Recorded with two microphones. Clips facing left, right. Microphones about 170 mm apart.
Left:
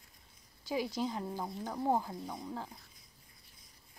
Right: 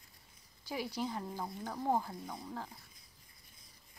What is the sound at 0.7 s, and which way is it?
Speech, 20° left (ahead or behind).